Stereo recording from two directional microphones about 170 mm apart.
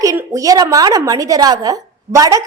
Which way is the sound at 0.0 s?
20° right (ahead or behind).